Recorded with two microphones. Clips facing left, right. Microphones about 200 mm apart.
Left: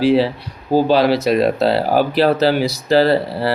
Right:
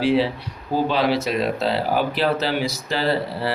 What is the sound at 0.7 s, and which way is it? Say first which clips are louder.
Speech: left 6 dB; 35° left (ahead or behind).